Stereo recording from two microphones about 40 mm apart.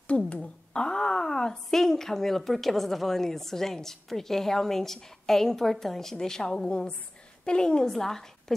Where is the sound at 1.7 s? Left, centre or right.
Centre.